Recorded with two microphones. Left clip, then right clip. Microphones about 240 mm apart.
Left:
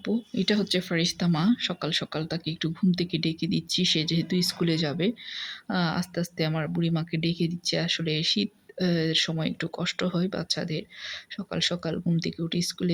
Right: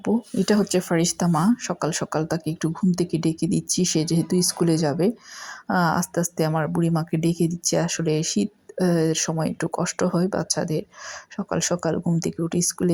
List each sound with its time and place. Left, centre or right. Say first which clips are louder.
0.1 s speech: right 5 dB; centre
0.5 s speech: right 6 dB; centre
7.3 s speech: right 6 dB; centre
7.6 s speech: right 2 dB; centre